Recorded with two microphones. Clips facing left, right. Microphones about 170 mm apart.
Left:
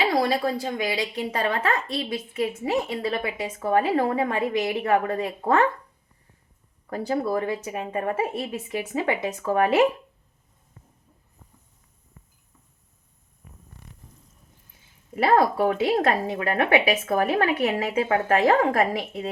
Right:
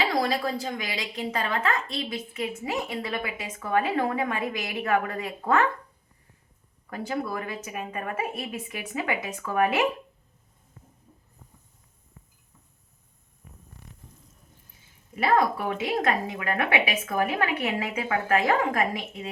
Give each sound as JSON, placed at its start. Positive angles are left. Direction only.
{"t": 0.0, "sound": "speech", "side_deg": 30}
{"t": 6.9, "sound": "speech", "side_deg": 35}
{"t": 15.1, "sound": "speech", "side_deg": 35}